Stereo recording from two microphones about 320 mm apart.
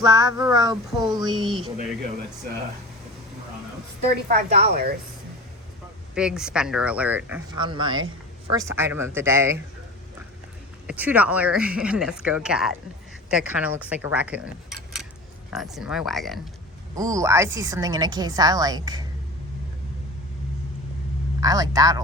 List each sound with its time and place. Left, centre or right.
0.0 s a woman's voice: centre
4.3 s a woman's voice: right
6.1 s a woman's voice: centre
10.8 s speech: centre
16.9 s a woman's voice: centre
21.4 s a woman's voice: centre